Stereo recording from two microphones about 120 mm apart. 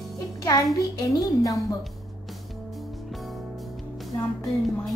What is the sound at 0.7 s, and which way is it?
A child's voice, 30° left (ahead or behind).